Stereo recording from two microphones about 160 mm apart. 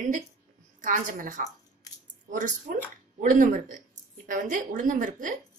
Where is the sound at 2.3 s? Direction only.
55° right (ahead or behind).